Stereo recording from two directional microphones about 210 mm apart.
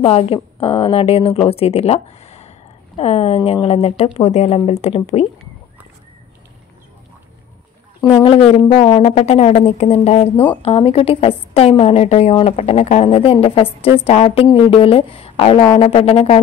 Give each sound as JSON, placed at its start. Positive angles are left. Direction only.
{"t": 0.0, "sound": "a woman's voice", "side_deg": 30}
{"t": 8.2, "sound": "a woman's voice", "side_deg": 25}